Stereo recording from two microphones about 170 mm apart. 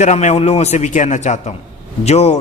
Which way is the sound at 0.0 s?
40° left (ahead or behind).